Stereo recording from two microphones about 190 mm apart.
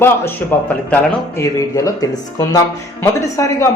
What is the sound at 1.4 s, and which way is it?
A woman's voice, 15° left (ahead or behind).